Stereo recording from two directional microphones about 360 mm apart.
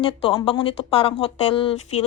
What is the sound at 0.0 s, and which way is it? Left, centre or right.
Speech, centre.